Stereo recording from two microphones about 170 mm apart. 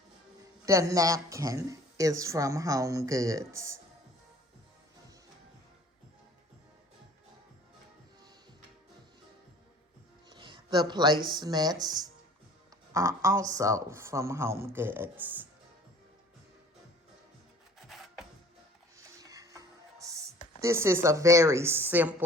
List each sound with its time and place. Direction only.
0.6 s speech: 20° right (ahead or behind)
10.2 s speech: 25° right (ahead or behind); by 15.4 s 10° right (ahead or behind)
17.8 s music: centre (ahead or behind)
18.9 s music: 20° right (ahead or behind)
20.6 s speech: 15° right (ahead or behind)